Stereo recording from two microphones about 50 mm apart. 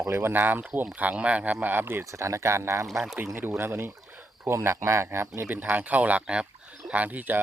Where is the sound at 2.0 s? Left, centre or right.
Right.